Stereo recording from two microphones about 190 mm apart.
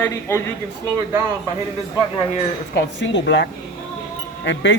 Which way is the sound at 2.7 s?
70° left (ahead or behind).